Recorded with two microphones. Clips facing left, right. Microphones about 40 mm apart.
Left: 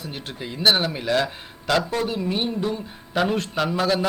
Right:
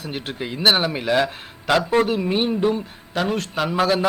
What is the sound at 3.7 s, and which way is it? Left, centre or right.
Speech, centre.